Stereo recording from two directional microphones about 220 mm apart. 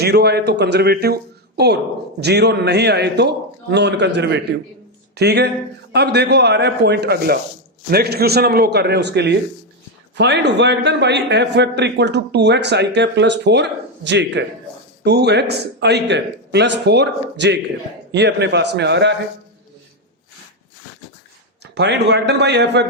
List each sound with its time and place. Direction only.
0.0 s a man's voice: 50° right (ahead or behind)
21.6 s a man's voice: 50° right (ahead or behind)